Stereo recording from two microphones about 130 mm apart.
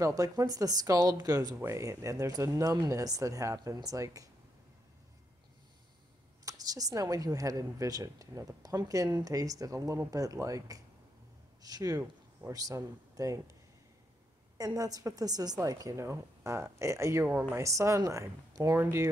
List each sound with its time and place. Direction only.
0.0 s a woman's voice: 25° right (ahead or behind)
6.4 s a woman's voice: 30° right (ahead or behind)
12.0 s a sound: 15° right (ahead or behind)
12.5 s a woman's voice: 25° right (ahead or behind)
14.6 s a woman's voice: 25° right (ahead or behind)